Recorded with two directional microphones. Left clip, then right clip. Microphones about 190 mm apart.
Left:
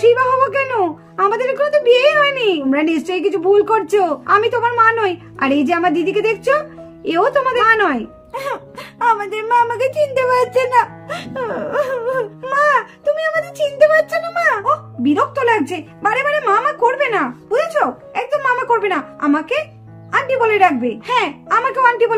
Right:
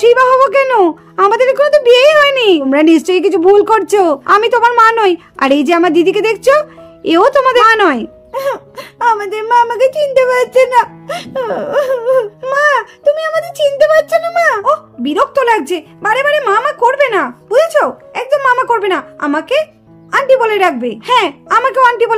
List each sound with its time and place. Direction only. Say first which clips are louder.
0.0 s speech: right 5 dB; 65° right (ahead or behind)
8.3 s speech: right 7 dB; 35° right (ahead or behind)
14.6 s speech: right 4 dB; 65° right (ahead or behind)